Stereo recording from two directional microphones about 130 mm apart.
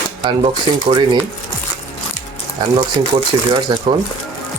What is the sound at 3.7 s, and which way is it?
Speech, 35° right (ahead or behind).